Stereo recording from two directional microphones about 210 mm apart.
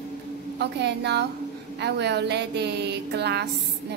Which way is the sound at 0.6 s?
55° right (ahead or behind).